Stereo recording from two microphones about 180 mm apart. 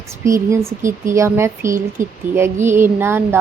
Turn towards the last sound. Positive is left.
turn(degrees=-10)  # may be behind; listen again after turning